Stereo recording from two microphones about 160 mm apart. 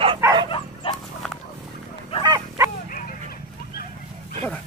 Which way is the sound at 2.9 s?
65° left (ahead or behind).